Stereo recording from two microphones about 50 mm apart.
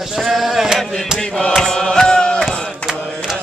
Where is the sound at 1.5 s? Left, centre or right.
Centre.